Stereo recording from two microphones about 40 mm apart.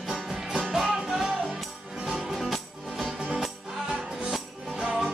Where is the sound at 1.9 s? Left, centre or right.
Centre.